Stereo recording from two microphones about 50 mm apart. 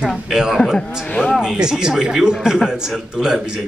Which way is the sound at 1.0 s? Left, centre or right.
Left.